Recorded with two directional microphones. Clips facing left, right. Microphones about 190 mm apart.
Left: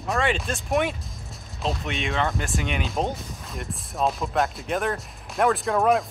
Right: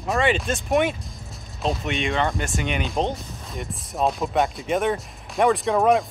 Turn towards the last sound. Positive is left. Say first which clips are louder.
# right 2 dB
turn(degrees=0)  # may be behind; listen again after turning